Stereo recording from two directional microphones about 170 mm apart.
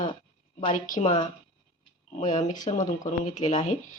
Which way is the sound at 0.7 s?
50° left (ahead or behind).